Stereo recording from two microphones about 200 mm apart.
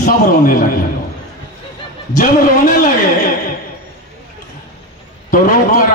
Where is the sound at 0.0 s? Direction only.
40° left (ahead or behind).